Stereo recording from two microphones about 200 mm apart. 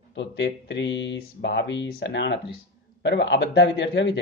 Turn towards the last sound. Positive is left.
turn(degrees=60)  # may be behind; listen again after turning